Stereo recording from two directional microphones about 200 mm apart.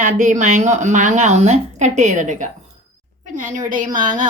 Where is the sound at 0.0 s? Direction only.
40° right (ahead or behind).